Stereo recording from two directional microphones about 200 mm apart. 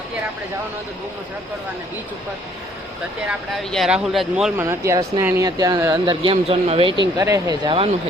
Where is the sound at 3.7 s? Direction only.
Centre (ahead or behind).